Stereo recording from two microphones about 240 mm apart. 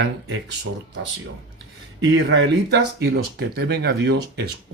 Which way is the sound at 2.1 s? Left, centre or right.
Right.